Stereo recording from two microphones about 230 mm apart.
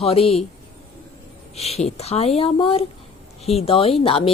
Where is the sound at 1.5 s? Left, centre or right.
Left.